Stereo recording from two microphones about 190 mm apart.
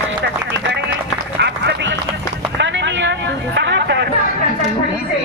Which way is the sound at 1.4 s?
60° right (ahead or behind).